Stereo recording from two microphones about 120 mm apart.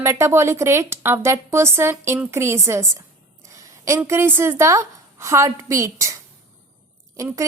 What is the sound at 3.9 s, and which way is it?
A woman's voice, 20° right (ahead or behind).